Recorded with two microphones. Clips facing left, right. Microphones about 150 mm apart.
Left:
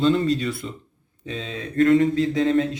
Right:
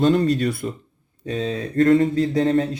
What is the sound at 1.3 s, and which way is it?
Speech, 40° right (ahead or behind).